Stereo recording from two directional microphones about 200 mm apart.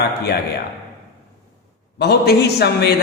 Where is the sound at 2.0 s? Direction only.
55° left (ahead or behind).